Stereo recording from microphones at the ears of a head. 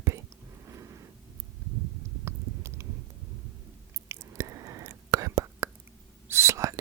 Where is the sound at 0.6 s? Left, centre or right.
Right.